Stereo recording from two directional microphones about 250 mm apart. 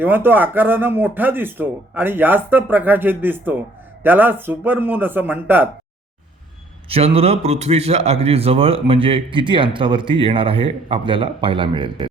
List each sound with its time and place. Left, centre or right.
0.0 s speech: centre
6.8 s a man's voice: right